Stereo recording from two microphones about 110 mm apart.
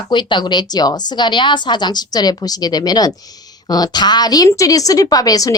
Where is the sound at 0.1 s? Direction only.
45° left (ahead or behind).